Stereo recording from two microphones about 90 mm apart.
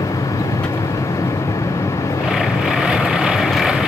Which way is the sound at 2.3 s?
5° right (ahead or behind).